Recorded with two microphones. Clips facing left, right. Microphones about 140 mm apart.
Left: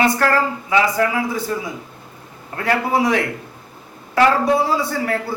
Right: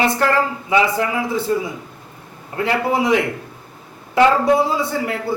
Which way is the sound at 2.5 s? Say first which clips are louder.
Even; 20° right (ahead or behind).